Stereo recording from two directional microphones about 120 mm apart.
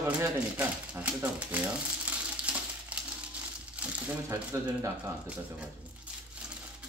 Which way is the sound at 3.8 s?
10° right (ahead or behind).